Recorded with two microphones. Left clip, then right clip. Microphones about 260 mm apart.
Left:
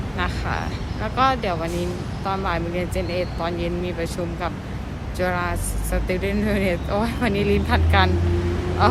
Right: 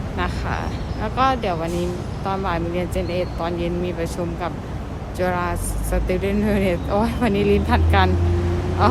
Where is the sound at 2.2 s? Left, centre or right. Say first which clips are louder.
Right 1 dB; centre.